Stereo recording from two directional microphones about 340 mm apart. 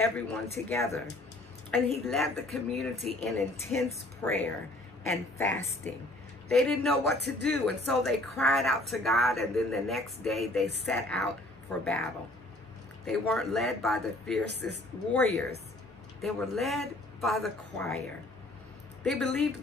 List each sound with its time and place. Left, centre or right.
0.0 s speech: centre
2.0 s speech: centre
7.1 s speech: right
7.6 s speech: centre
14.4 s speech: right
16.2 s speech: centre